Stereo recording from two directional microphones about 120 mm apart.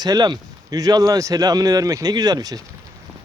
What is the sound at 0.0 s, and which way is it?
Speech, 35° right (ahead or behind).